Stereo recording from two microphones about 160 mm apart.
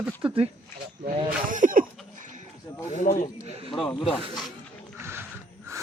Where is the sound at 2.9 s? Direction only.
55° left (ahead or behind).